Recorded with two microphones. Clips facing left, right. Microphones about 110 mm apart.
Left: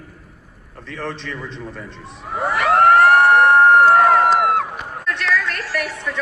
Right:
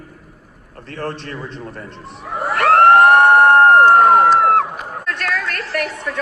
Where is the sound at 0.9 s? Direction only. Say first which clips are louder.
Right 2 dB; 50° right (ahead or behind).